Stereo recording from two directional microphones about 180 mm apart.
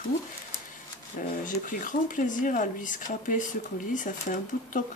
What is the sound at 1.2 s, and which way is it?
Speech, 50° left (ahead or behind).